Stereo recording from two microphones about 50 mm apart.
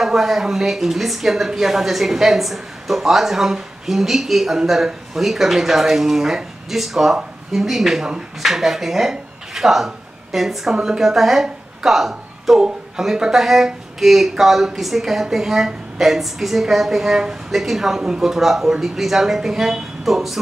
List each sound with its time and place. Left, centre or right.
0.0 s a woman's voice: centre